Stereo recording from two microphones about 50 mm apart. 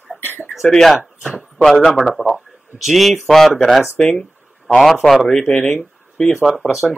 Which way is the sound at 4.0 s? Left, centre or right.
Centre.